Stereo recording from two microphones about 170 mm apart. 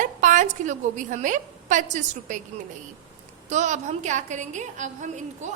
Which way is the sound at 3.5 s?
45° right (ahead or behind).